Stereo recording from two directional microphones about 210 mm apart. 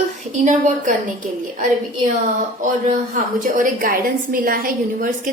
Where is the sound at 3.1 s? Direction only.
40° right (ahead or behind).